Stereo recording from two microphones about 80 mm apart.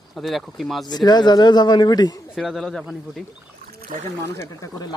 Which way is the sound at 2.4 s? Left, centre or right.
Centre.